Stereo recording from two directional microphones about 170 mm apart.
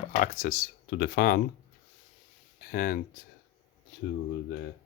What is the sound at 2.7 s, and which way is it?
Speech, 60° left (ahead or behind).